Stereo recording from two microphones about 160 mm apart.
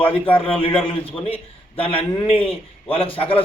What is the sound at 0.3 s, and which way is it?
A man's voice, 35° left (ahead or behind).